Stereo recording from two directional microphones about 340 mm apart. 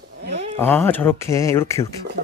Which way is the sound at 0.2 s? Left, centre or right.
Right.